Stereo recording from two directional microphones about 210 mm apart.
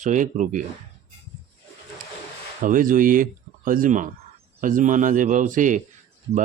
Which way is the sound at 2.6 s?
40° right (ahead or behind).